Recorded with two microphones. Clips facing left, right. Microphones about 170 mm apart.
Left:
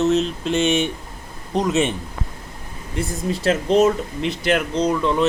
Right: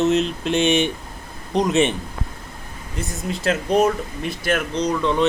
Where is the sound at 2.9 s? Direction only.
30° left (ahead or behind).